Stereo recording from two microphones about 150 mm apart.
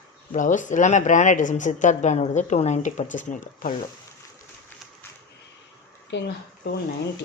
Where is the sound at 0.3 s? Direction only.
60° left (ahead or behind).